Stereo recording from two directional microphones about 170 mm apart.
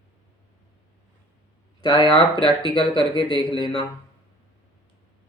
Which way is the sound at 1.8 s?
25° left (ahead or behind).